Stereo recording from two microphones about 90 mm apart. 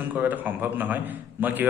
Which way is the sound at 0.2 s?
20° right (ahead or behind).